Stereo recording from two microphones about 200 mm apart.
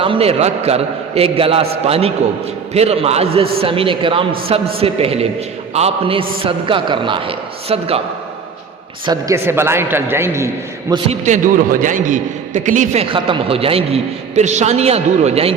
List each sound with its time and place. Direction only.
0.0 s a man's voice: 30° right (ahead or behind)
9.0 s a man's voice: 15° right (ahead or behind)
11.3 s a man's voice: 45° right (ahead or behind)